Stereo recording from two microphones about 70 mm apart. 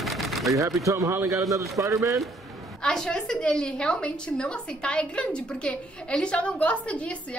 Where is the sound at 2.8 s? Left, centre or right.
Centre.